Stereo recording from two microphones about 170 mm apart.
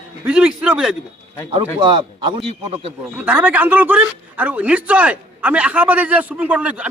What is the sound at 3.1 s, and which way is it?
Speech, 10° right (ahead or behind).